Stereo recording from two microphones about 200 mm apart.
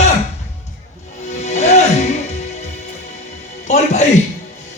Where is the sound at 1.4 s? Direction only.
35° left (ahead or behind).